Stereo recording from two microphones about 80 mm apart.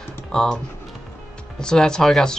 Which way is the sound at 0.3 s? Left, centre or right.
Centre.